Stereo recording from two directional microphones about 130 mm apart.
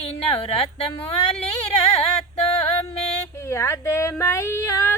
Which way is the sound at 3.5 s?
20° left (ahead or behind).